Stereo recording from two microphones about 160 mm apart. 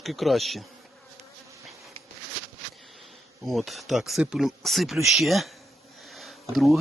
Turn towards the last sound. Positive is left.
turn(degrees=0)  # may be behind; listen again after turning